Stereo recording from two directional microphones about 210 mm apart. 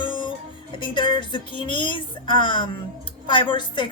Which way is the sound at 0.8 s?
20° left (ahead or behind).